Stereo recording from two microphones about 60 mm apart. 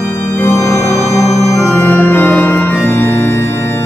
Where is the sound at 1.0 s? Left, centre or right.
Left.